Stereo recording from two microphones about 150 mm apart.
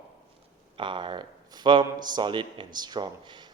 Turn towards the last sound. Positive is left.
turn(degrees=-30)  # may be behind; listen again after turning